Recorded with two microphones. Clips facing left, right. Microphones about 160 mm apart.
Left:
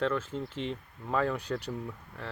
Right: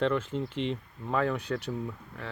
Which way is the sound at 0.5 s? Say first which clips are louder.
Right 4 dB; 70° right (ahead or behind).